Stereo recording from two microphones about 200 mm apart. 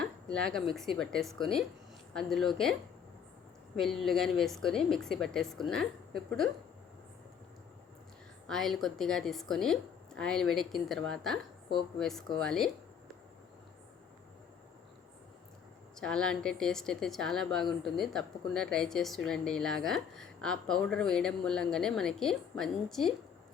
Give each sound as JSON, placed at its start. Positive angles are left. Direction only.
{"t": 0.0, "sound": "a woman's voice", "side_deg": 5}
{"t": 3.8, "sound": "a woman's voice", "side_deg": 0}
{"t": 8.4, "sound": "a woman's voice", "side_deg": 0}
{"t": 16.0, "sound": "a woman's voice", "side_deg": 5}